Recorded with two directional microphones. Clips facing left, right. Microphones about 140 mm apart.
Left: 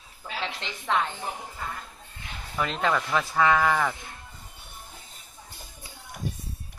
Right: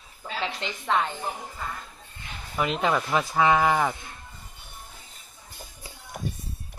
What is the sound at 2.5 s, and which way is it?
Speech, 15° right (ahead or behind).